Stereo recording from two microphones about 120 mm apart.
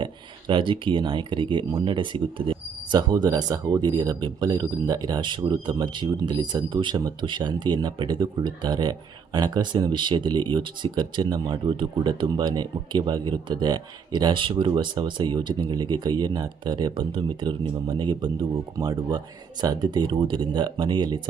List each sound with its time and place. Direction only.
0.0 s speech: 45° right (ahead or behind)